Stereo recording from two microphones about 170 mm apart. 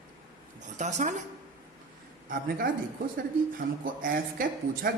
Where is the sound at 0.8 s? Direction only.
45° right (ahead or behind).